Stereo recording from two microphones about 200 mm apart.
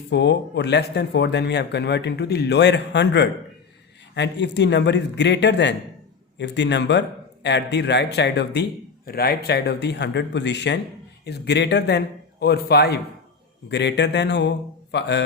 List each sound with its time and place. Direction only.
0.1 s speech: 60° left (ahead or behind)